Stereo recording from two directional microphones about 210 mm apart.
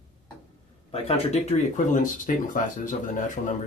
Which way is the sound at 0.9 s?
30° left (ahead or behind).